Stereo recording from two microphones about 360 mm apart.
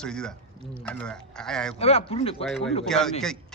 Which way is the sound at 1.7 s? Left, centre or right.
Centre.